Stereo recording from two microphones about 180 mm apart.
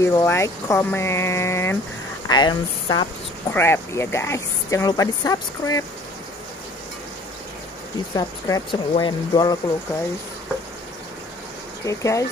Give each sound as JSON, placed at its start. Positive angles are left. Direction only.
{"t": 0.0, "sound": "speech", "side_deg": 15}
{"t": 3.5, "sound": "speech", "side_deg": 15}
{"t": 8.1, "sound": "speech", "side_deg": 20}
{"t": 11.8, "sound": "speech", "side_deg": 15}